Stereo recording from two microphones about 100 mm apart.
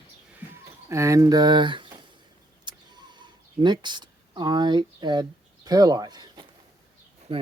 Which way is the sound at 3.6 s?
50° right (ahead or behind).